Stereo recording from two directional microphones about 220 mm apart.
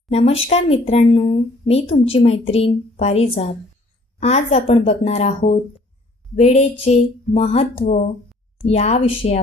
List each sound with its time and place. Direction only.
0.1 s speech: 25° left (ahead or behind)